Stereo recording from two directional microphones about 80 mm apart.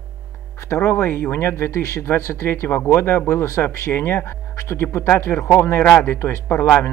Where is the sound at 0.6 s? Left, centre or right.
Left.